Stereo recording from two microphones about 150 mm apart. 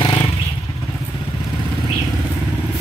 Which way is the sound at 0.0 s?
30° left (ahead or behind).